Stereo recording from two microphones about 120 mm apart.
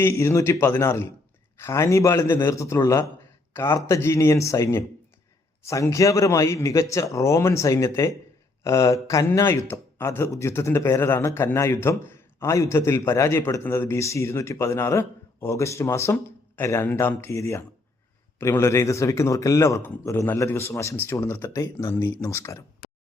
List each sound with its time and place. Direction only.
0.0 s a man's voice: 20° left (ahead or behind)